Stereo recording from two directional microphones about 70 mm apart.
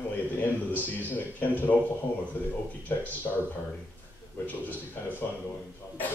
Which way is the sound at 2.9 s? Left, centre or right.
Left.